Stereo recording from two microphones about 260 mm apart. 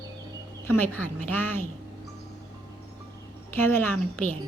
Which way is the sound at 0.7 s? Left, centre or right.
Centre.